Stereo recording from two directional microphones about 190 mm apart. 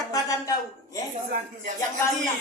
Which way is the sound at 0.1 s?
15° left (ahead or behind).